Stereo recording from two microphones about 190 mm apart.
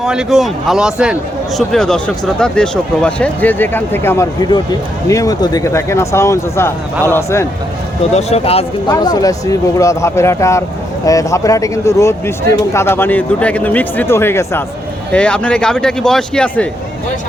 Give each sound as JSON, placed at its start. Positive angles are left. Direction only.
{"t": 0.0, "sound": "speech", "side_deg": -5}
{"t": 8.1, "sound": "speech", "side_deg": 35}
{"t": 9.0, "sound": "speech", "side_deg": 20}